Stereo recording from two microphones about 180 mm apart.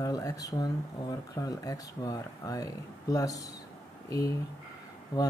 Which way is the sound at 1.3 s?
20° left (ahead or behind).